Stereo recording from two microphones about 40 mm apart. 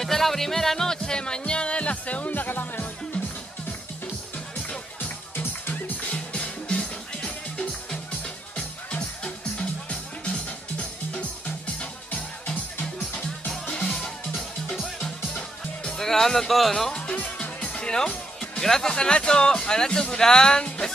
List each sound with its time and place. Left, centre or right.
0.0 s music: centre; by 2.3 s left
2.3 s music: left
5.0 s music: left
6.1 s music: left
13.5 s music: centre
16.0 s speech: centre
17.1 s music: left
18.7 s speech: centre
18.9 s music: left